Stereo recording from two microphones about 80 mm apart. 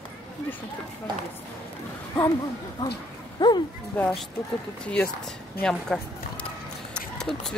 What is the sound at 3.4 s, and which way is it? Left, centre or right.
Speech, left.